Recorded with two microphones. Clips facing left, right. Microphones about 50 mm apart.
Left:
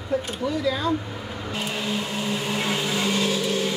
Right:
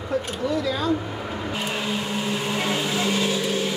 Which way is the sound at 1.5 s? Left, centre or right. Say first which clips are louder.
Left 1 dB; centre.